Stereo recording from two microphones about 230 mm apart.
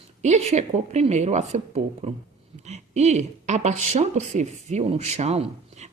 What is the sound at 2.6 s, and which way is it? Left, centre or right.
Speech, right.